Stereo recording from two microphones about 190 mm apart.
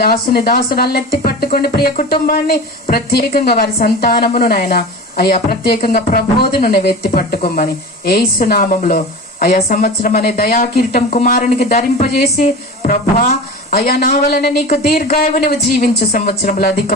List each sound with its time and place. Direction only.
0.0 s speech: 55° left (ahead or behind)
11.7 s a woman's voice: 35° left (ahead or behind); by 14.5 s 55° left (ahead or behind)
15.1 s a woman's voice: 40° left (ahead or behind)
15.7 s speech: 50° left (ahead or behind)